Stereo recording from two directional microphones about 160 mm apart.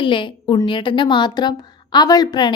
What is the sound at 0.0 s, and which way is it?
A woman's voice, 30° left (ahead or behind).